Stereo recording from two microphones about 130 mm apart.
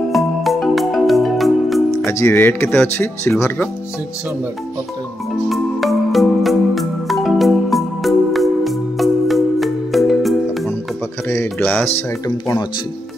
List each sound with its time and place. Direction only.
0.1 s music: centre (ahead or behind)
2.0 s speech: 20° left (ahead or behind)
5.5 s music: centre (ahead or behind)
11.2 s speech: 15° left (ahead or behind)